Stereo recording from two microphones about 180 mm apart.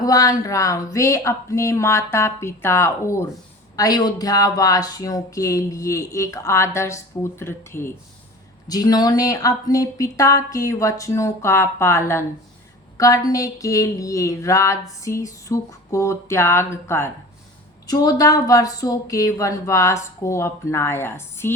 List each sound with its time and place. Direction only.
0.0 s speech: 20° left (ahead or behind)